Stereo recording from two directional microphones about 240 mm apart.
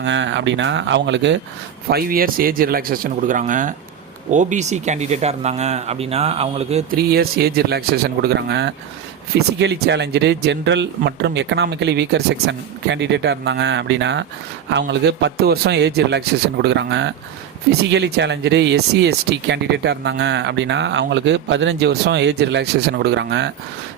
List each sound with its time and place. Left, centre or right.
0.0 s speech: right
6.9 s speech: right